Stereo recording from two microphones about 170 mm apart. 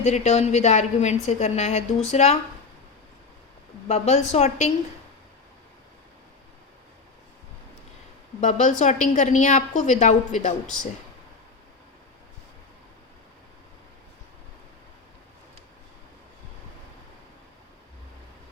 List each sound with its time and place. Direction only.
0.0 s a woman's voice: 40° left (ahead or behind)
3.8 s a woman's voice: 40° left (ahead or behind)
8.4 s a woman's voice: 45° left (ahead or behind)